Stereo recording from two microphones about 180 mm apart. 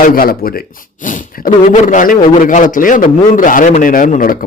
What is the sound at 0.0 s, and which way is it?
A man's voice, 55° left (ahead or behind).